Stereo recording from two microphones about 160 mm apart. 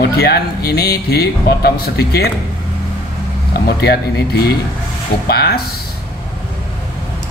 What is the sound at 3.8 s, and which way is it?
Speech, 85° left.